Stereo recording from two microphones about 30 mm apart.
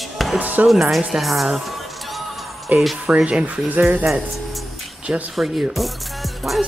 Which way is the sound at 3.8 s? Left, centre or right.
Right.